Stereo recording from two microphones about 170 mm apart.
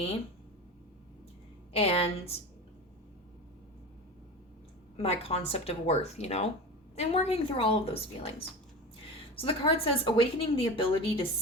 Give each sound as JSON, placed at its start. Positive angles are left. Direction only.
{"t": 1.7, "sound": "a woman's voice", "side_deg": 35}
{"t": 4.9, "sound": "a woman's voice", "side_deg": 35}
{"t": 9.4, "sound": "a woman's voice", "side_deg": 35}